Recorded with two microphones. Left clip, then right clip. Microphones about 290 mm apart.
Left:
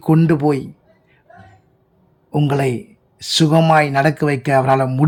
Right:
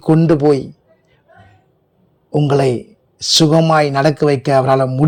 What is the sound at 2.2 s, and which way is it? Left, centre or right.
Speech, centre.